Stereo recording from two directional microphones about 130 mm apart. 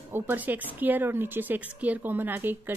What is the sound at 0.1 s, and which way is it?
A woman's voice, 15° right (ahead or behind).